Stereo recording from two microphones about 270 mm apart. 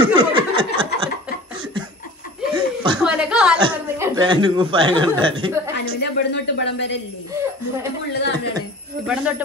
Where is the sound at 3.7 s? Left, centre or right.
Centre.